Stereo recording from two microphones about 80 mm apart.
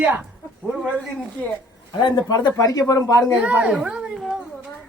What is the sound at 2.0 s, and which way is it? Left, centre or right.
Speech, left.